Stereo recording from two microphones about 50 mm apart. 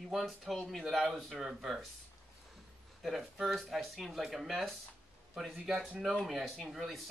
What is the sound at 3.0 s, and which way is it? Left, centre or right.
Speech, centre.